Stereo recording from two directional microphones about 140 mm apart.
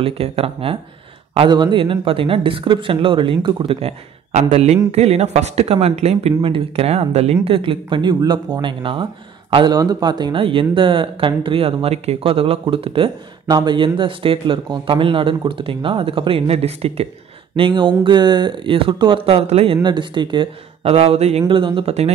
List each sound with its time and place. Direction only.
0.0 s speech: 45° right (ahead or behind)
4.3 s speech: 50° right (ahead or behind)
17.6 s speech: 35° right (ahead or behind)